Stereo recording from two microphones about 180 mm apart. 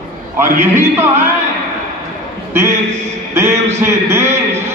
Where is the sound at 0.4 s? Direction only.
15° right (ahead or behind).